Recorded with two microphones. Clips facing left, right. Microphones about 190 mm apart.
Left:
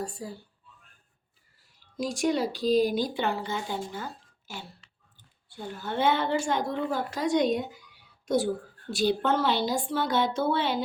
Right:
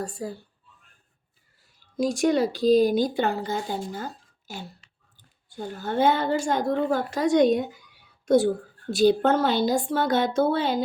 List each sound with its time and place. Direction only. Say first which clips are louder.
0.0 s speech: right 4 dB; 50° right (ahead or behind)
2.0 s speech: right 5 dB; 45° right (ahead or behind)
8.9 s speech: right 6 dB; 45° right (ahead or behind)